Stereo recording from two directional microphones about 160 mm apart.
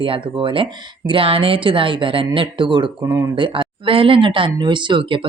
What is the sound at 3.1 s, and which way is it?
Speech, 20° right (ahead or behind).